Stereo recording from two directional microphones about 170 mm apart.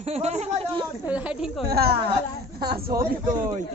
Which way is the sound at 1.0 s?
10° right (ahead or behind).